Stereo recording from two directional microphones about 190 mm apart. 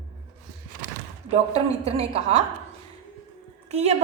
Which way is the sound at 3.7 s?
35° right (ahead or behind).